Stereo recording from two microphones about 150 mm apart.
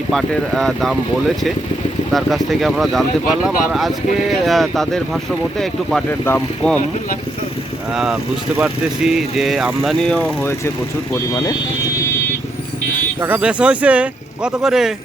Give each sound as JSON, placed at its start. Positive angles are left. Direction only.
{"t": 0.1, "sound": "speech", "side_deg": 5}
{"t": 2.1, "sound": "speech", "side_deg": 0}
{"t": 6.1, "sound": "speech", "side_deg": 15}
{"t": 7.9, "sound": "speech", "side_deg": -5}
{"t": 11.1, "sound": "speech", "side_deg": 20}
{"t": 13.2, "sound": "speech", "side_deg": -10}